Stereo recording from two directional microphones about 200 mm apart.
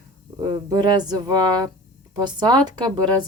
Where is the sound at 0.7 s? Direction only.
20° right (ahead or behind).